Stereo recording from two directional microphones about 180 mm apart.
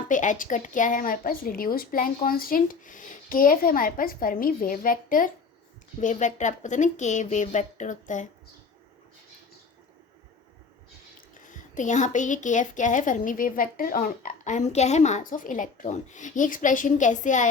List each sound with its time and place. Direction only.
0.1 s a woman's voice: 45° left (ahead or behind)
11.4 s a woman's voice: 45° left (ahead or behind)